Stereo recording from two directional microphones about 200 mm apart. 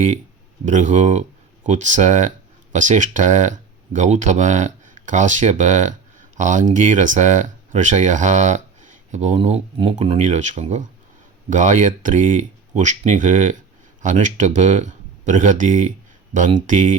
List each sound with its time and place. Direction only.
0.6 s speech: 40° right (ahead or behind)